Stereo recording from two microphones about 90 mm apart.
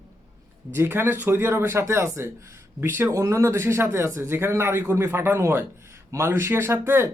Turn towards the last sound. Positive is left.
turn(degrees=-25)  # may be behind; listen again after turning